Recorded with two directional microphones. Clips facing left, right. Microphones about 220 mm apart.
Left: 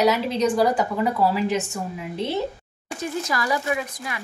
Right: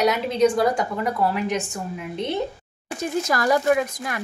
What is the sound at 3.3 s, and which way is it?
Speech, 45° right (ahead or behind).